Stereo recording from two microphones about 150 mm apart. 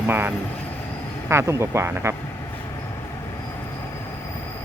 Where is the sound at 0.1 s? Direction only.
15° right (ahead or behind).